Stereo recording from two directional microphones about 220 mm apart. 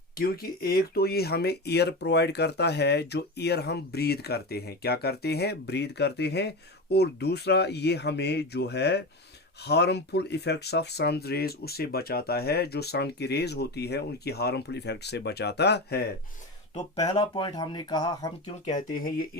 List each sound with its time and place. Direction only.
0.2 s speech: 45° left (ahead or behind)
17.0 s speech: 20° left (ahead or behind)